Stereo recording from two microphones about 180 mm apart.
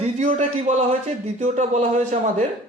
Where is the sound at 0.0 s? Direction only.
40° right (ahead or behind).